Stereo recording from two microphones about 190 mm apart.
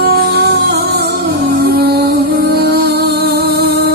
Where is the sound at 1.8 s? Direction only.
55° right (ahead or behind).